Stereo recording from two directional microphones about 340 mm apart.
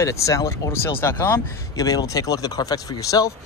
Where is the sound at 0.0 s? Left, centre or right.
Centre.